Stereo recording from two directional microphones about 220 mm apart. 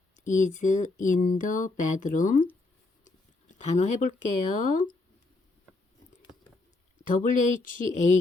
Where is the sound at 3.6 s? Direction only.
35° left (ahead or behind).